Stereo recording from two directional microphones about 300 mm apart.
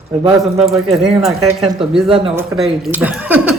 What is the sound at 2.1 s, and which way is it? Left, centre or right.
Speech, centre.